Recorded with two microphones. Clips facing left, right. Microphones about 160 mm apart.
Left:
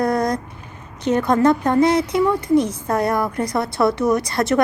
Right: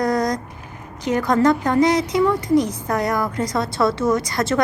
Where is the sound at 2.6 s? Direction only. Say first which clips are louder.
Left 2 dB; 25° left (ahead or behind).